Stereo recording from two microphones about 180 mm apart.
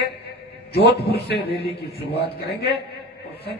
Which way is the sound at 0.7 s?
65° left (ahead or behind).